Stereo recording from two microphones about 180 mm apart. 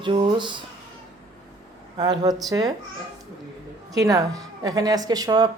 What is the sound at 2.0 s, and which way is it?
Speech, 25° right (ahead or behind).